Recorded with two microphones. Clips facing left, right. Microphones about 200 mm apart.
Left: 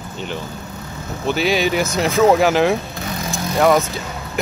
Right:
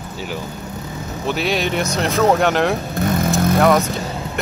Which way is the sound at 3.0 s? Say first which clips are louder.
Right 8 dB; 50° right (ahead or behind).